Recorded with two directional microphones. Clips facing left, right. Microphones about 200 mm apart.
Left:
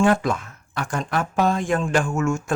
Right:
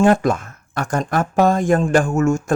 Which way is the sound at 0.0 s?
45° right (ahead or behind).